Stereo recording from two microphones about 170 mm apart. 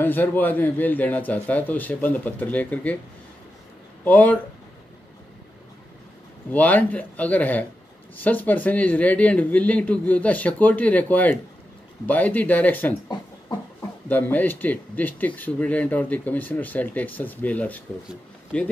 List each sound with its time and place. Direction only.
0.0 s speech: 10° left (ahead or behind)
4.0 s speech: 10° left (ahead or behind)
6.5 s speech: 10° left (ahead or behind)
13.1 s a sound: 25° left (ahead or behind)
14.0 s speech: 10° left (ahead or behind)